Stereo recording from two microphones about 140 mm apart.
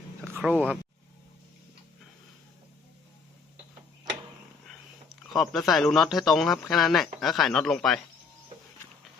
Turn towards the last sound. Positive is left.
turn(degrees=5)  # may be behind; listen again after turning